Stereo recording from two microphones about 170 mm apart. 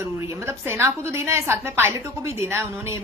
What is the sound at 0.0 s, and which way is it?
A woman's voice, 15° right (ahead or behind).